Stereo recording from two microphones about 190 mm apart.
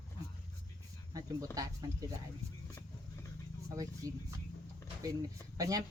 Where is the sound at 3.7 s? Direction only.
20° right (ahead or behind).